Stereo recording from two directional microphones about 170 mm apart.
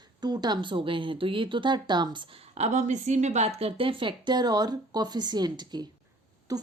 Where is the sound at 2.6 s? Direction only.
40° right (ahead or behind).